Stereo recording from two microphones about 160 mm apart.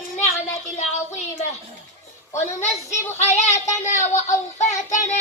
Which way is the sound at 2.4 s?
50° left (ahead or behind).